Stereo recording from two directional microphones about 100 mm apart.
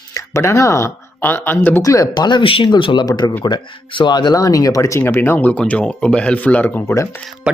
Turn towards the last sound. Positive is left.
turn(degrees=-10)  # may be behind; listen again after turning